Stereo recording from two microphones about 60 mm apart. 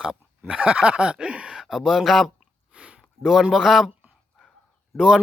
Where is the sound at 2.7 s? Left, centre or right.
Centre.